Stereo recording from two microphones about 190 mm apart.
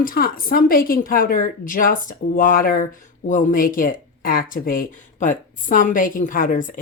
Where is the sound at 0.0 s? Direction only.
50° left (ahead or behind).